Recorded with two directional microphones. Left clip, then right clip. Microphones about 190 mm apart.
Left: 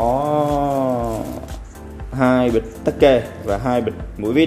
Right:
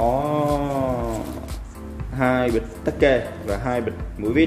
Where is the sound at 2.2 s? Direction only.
30° left (ahead or behind).